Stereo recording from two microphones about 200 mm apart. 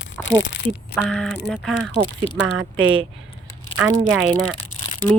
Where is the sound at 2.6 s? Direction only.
80° right.